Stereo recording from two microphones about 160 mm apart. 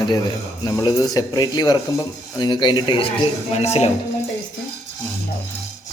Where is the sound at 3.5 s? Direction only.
40° left (ahead or behind).